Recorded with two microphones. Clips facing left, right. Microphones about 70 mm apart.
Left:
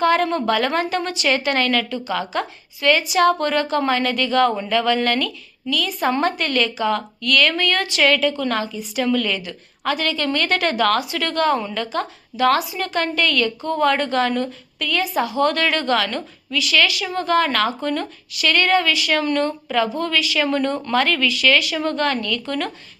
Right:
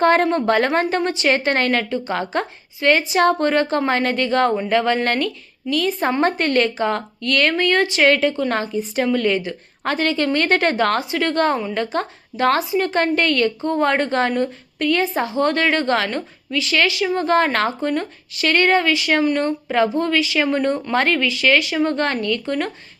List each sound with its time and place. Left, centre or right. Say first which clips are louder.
0.0 s a woman's voice: right 2 dB; right; by 20.9 s centre
20.9 s speech: left 2 dB; right